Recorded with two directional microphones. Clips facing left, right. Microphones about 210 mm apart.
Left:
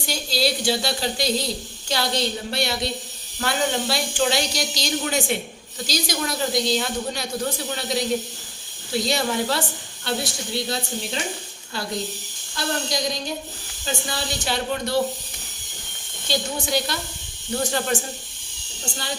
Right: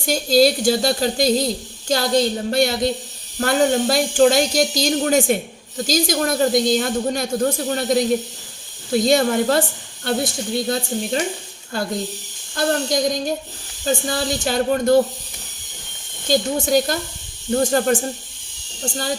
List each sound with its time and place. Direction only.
0.0 s speech: 45° right (ahead or behind)
12.5 s speech: 50° right (ahead or behind)
16.3 s speech: 45° right (ahead or behind)